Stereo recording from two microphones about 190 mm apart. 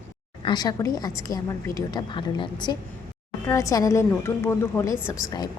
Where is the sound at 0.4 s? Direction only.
20° left (ahead or behind).